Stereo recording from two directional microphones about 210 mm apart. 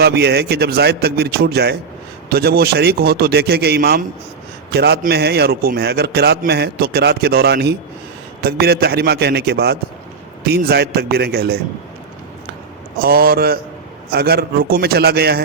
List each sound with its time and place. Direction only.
0.0 s a man's voice: 50° right (ahead or behind)
13.0 s a man's voice: 45° right (ahead or behind)